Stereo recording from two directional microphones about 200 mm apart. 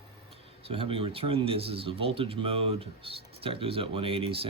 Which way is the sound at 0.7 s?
25° right (ahead or behind).